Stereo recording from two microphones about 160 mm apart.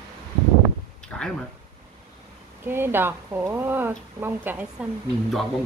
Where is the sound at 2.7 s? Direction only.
15° right (ahead or behind).